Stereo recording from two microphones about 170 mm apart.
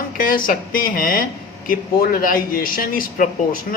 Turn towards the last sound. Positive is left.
turn(degrees=55)  # may be behind; listen again after turning